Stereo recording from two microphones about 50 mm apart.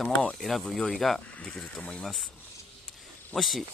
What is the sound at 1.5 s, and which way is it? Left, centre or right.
Speech, centre.